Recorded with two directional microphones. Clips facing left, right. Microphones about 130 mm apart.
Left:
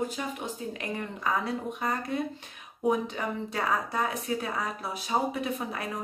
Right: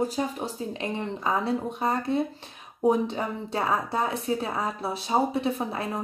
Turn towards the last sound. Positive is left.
turn(degrees=-30)  # may be behind; listen again after turning